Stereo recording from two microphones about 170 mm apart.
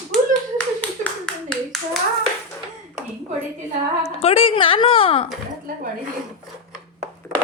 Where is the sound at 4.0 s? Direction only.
35° left (ahead or behind).